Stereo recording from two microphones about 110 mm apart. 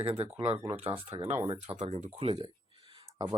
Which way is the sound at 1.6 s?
85° right.